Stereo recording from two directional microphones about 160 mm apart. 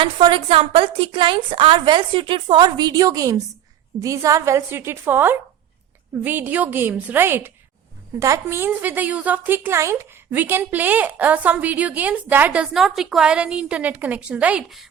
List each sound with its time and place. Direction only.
0.0 s a woman's voice: 30° right (ahead or behind); by 14.8 s 5° right (ahead or behind)